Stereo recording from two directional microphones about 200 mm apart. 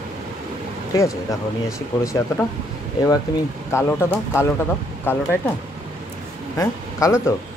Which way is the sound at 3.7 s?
15° left (ahead or behind).